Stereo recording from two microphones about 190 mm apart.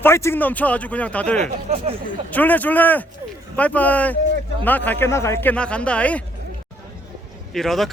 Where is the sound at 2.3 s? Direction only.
10° left (ahead or behind).